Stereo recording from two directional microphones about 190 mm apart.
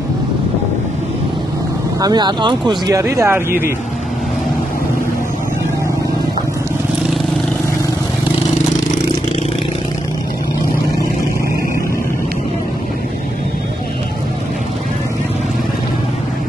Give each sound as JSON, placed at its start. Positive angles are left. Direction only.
{"t": 2.0, "sound": "speech", "side_deg": -20}